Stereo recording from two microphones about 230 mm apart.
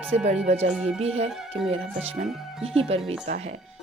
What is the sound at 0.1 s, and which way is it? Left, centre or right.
Speech, right.